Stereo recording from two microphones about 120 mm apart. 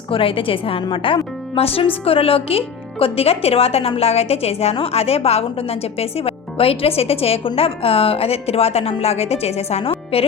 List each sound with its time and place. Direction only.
0.1 s a woman's voice: 50° left (ahead or behind)